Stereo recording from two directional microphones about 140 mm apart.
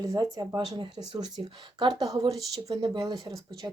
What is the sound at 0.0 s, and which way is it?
Speech, 30° right (ahead or behind).